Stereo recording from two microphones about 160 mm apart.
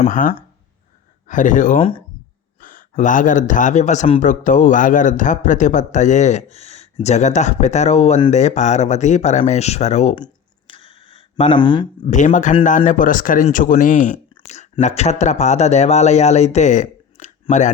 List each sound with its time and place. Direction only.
0.1 s a man's voice: 60° left (ahead or behind)
1.8 s speech: 35° left (ahead or behind)
2.6 s a man's voice: 60° left (ahead or behind)
10.7 s a sound: 35° left (ahead or behind)
12.0 s a man's voice: 50° left (ahead or behind)